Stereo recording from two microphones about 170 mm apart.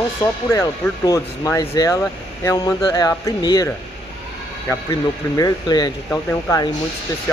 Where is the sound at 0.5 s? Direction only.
20° left (ahead or behind).